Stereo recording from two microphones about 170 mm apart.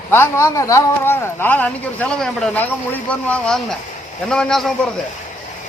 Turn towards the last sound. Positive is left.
turn(degrees=0)  # may be behind; listen again after turning